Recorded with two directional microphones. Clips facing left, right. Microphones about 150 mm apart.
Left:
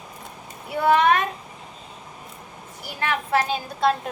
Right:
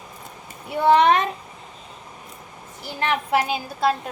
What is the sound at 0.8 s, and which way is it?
Speech, 25° right (ahead or behind).